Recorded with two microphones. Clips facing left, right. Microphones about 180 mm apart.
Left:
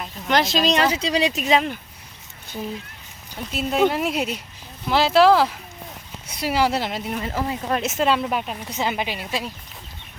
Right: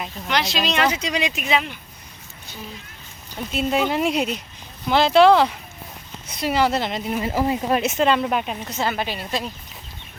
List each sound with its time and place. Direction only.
0.3 s speech: 45° left (ahead or behind)
3.5 s speech: centre (ahead or behind)
7.3 s speech: 15° right (ahead or behind)
7.8 s speech: 5° left (ahead or behind)
8.7 s speech: 15° left (ahead or behind)